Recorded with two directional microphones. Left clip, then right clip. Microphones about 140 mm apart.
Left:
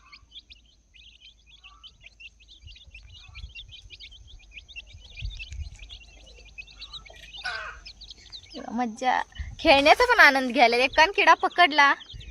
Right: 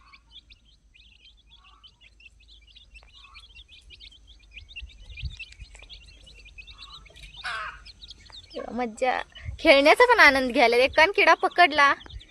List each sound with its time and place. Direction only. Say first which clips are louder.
2.9 s bird: even; 10° left (ahead or behind)
5.8 s bird: left 2 dB; 10° left (ahead or behind)
8.3 s speech: right 2 dB; 20° right (ahead or behind)